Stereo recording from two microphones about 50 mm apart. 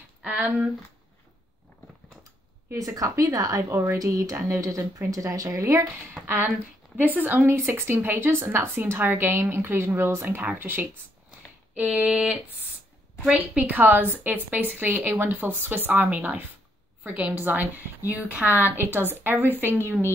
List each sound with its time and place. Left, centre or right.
0.2 s speech: right
3.0 s speech: right
3.5 s speech: right
6.2 s a woman's voice: right
7.4 s speech: right
10.2 s speech: right
12.1 s a sound: centre
13.6 s a woman's voice: right